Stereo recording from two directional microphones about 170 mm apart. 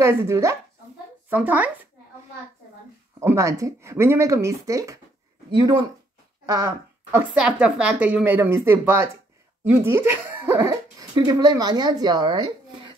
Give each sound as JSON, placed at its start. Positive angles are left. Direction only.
{"t": 0.0, "sound": "a woman's voice", "side_deg": -15}
{"t": 3.2, "sound": "a woman's voice", "side_deg": -15}
{"t": 6.4, "sound": "a sound", "side_deg": -20}
{"t": 7.2, "sound": "a woman's voice", "side_deg": -5}